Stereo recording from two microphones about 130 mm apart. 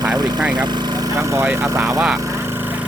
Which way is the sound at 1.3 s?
20° right (ahead or behind).